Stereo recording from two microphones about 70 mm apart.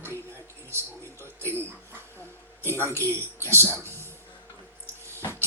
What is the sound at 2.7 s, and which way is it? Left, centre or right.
Speech, left.